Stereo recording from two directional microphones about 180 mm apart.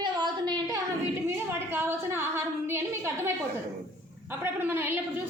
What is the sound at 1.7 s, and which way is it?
A woman's voice, 10° right (ahead or behind).